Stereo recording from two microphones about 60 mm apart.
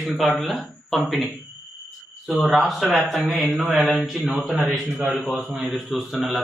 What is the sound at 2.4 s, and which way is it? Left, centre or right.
A man's voice, centre.